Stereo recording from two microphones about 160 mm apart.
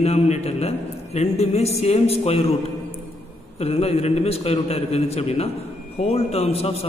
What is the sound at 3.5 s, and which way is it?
A man's voice, 40° left (ahead or behind).